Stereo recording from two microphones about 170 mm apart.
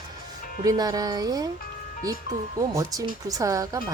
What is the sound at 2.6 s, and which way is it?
Speech, 20° right (ahead or behind).